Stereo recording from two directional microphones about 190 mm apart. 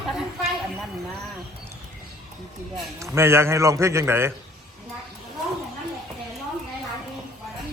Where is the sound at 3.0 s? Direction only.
15° right (ahead or behind).